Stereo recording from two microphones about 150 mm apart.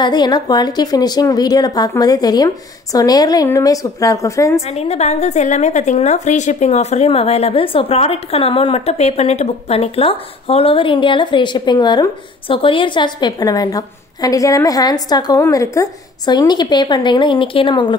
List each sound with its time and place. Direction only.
0.0 s speech: 30° left (ahead or behind)
4.6 s a woman's voice: 45° left (ahead or behind)